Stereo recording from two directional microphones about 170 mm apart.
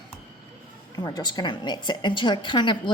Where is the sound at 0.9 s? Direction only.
25° left (ahead or behind).